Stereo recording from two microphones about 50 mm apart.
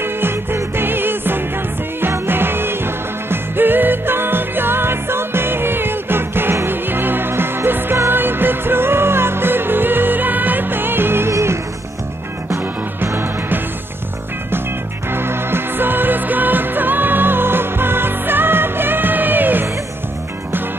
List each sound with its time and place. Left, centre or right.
0.0 s music: right
11.3 s music: right
13.0 s music: right
15.0 s music: right